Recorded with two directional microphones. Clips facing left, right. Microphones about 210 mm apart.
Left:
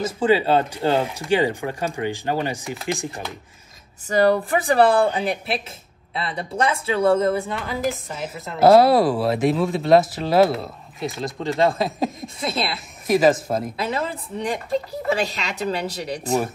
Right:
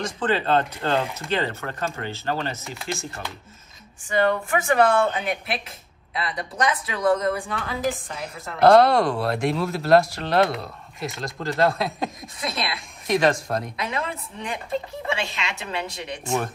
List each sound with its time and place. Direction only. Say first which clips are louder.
0.0 s speech: left 5 dB; 10° left (ahead or behind)
4.1 s speech: left 4 dB; 40° left (ahead or behind)
7.5 s speech: left 2 dB; centre (ahead or behind)
12.4 s speech: left 4 dB; 30° left (ahead or behind)
12.7 s speech: left 3 dB; 5° left (ahead or behind)
13.7 s speech: left 3 dB; 30° left (ahead or behind)
16.3 s speech: left 3 dB; 5° left (ahead or behind)